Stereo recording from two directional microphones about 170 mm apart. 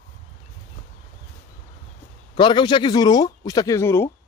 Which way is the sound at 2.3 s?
25° left (ahead or behind).